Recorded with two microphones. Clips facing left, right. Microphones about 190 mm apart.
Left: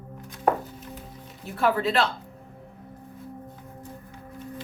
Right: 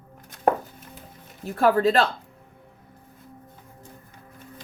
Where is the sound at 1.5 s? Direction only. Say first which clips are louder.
Right 4 dB; 40° right (ahead or behind).